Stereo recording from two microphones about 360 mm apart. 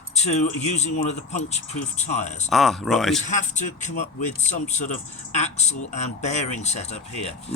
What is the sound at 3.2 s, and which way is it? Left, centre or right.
Speech, centre.